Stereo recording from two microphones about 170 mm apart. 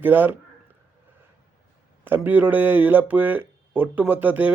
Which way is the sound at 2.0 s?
10° right (ahead or behind).